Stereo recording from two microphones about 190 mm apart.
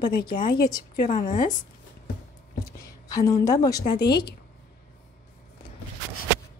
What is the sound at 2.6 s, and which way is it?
A woman's voice, 20° left (ahead or behind).